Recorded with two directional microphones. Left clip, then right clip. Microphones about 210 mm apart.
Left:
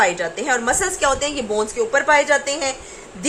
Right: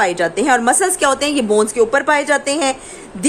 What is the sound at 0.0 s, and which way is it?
A woman's voice, 55° right (ahead or behind).